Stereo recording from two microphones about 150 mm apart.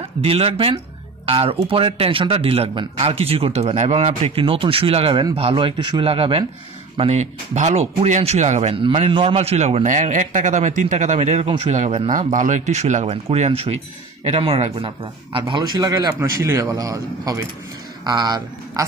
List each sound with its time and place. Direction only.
0.2 s a man's voice: 40° right (ahead or behind)
8.7 s a man's voice: 40° right (ahead or behind)
11.1 s a man's voice: 40° right (ahead or behind)
12.1 s a man's voice: 60° right (ahead or behind); by 18.9 s 25° right (ahead or behind)